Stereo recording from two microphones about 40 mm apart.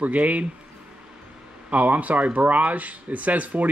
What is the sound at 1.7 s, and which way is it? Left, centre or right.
Speech, right.